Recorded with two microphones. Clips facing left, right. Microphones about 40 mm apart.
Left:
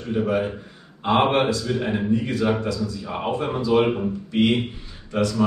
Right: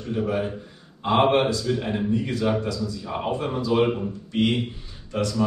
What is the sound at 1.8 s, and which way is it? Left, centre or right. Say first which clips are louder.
A man's voice: left 2 dB; centre.